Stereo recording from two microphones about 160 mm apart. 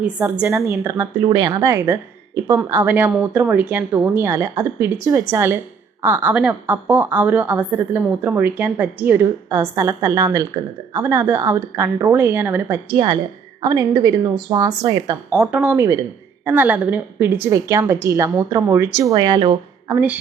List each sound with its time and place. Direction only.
0.0 s a woman's voice: 10° right (ahead or behind)
15.3 s a woman's voice: 5° right (ahead or behind); by 19.5 s 30° right (ahead or behind)
19.9 s a woman's voice: 10° right (ahead or behind)